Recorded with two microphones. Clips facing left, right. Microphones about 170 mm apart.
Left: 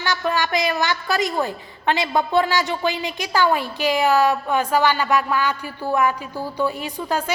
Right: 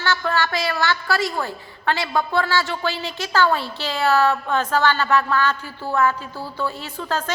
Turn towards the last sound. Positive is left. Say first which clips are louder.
# left 2 dB
turn(degrees=10)  # may be behind; listen again after turning